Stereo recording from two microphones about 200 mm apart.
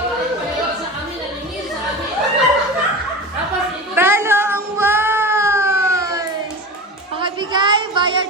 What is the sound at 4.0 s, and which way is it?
Music, 10° right (ahead or behind).